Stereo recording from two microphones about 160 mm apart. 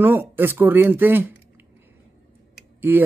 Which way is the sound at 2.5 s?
15° right (ahead or behind).